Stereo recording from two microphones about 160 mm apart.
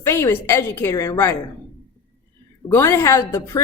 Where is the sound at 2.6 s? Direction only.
20° left (ahead or behind).